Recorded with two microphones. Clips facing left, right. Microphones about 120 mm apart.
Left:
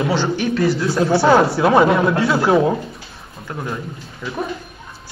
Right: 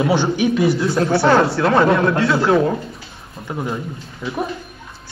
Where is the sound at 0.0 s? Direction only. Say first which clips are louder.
Right 2 dB; 15° right (ahead or behind).